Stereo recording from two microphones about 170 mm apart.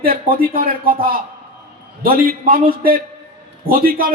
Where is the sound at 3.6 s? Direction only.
55° right (ahead or behind).